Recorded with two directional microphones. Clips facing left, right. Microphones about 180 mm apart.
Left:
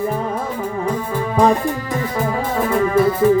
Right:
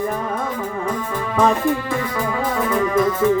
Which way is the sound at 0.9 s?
35° left (ahead or behind).